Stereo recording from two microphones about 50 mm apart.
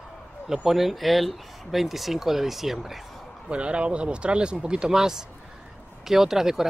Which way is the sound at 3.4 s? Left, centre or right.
Right.